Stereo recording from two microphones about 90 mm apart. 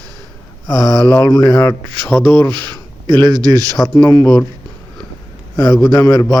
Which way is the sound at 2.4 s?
60° right (ahead or behind).